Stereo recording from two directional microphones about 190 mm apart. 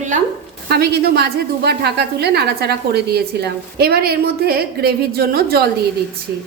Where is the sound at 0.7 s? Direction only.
55° right (ahead or behind).